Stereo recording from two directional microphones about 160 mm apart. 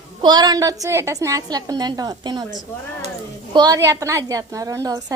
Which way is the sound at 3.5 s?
25° right (ahead or behind).